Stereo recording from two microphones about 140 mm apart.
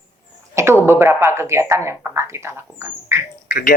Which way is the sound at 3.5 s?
80° left.